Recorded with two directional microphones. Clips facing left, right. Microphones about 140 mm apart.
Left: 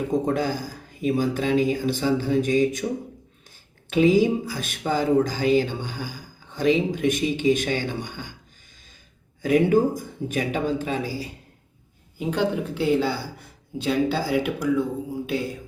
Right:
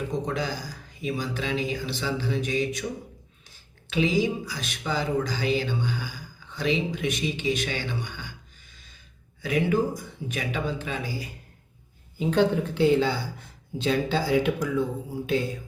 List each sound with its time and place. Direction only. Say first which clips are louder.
0.1 s speech: left 6 dB; 50° left (ahead or behind)
3.8 s speech: left 6 dB; 45° left (ahead or behind)
9.4 s speech: left 6 dB; 45° left (ahead or behind)
12.3 s speech: right 2 dB; 10° left (ahead or behind)